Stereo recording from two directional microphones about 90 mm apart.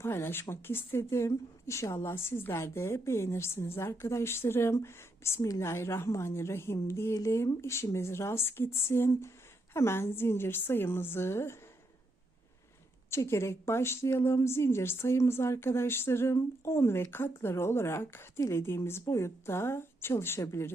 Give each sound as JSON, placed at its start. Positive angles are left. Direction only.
{"t": 0.0, "sound": "a woman's voice", "side_deg": 25}
{"t": 13.1, "sound": "a woman's voice", "side_deg": 30}